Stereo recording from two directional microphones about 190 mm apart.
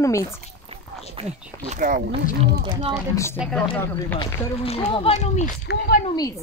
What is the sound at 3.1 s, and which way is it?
Speech, 15° left (ahead or behind).